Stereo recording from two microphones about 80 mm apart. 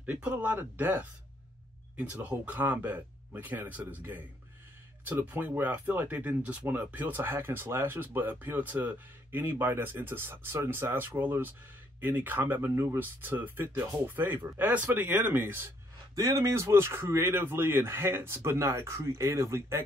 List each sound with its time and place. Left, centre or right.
0.0 s speech: centre
16.2 s speech: right